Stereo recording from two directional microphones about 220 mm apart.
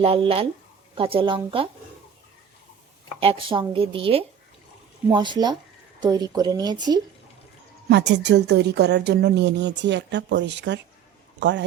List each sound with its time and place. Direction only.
0.0 s a woman's voice: 25° right (ahead or behind)
3.2 s a woman's voice: 25° right (ahead or behind)
7.9 s a woman's voice: 50° right (ahead or behind)